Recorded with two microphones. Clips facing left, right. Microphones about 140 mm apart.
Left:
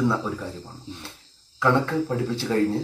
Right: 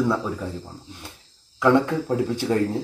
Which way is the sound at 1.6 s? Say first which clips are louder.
Right 3 dB; 15° right (ahead or behind).